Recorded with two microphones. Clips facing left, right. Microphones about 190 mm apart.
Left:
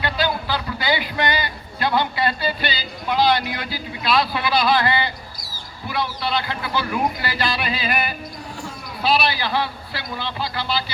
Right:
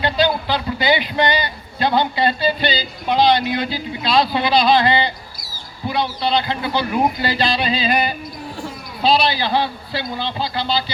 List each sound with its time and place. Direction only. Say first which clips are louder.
0.0 s speech: right 5 dB; 25° right (ahead or behind)